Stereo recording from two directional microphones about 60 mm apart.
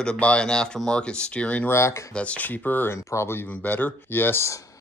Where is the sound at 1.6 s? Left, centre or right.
Left.